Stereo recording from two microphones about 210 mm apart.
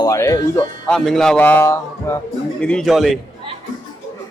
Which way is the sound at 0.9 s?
5° left (ahead or behind).